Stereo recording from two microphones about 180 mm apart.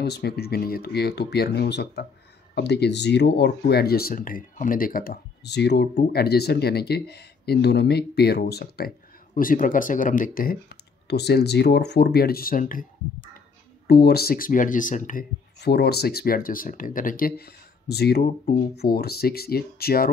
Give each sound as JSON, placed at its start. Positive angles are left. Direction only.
{"t": 0.0, "sound": "speech", "side_deg": 65}
{"t": 13.8, "sound": "speech", "side_deg": 60}
{"t": 15.6, "sound": "speech", "side_deg": 65}